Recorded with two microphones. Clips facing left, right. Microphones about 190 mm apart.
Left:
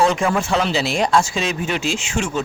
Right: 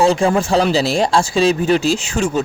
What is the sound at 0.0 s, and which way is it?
Speech, 30° right (ahead or behind).